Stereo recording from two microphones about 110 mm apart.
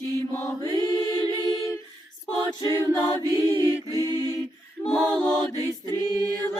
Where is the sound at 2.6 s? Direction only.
35° right (ahead or behind).